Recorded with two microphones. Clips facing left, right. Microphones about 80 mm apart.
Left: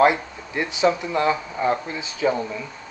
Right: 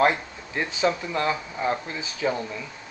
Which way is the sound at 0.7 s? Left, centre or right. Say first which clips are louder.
Left 5 dB; centre.